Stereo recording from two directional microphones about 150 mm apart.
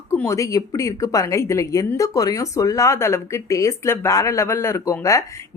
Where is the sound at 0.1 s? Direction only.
20° left (ahead or behind).